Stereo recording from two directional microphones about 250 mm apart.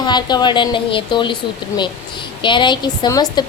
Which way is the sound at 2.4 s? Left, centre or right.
Centre.